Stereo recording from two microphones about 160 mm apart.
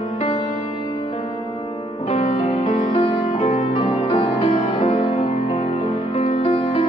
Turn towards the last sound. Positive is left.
turn(degrees=35)  # may be behind; listen again after turning